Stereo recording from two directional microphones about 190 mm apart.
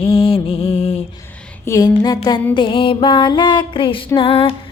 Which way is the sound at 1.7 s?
20° left (ahead or behind).